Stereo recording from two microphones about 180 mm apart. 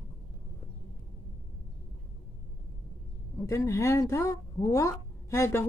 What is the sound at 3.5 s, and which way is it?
Speech, 15° left (ahead or behind).